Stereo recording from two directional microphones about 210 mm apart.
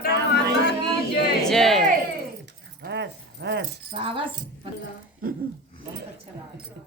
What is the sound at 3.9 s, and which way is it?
Speech, 25° right (ahead or behind).